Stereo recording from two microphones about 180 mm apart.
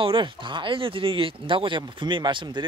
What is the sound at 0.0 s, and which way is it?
Speech, 25° right (ahead or behind).